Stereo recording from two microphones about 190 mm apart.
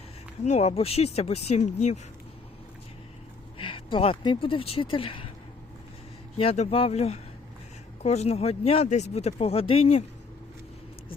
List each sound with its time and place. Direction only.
0.4 s speech: 35° left (ahead or behind)
3.6 s speech: 25° left (ahead or behind)
6.3 s speech: 30° left (ahead or behind)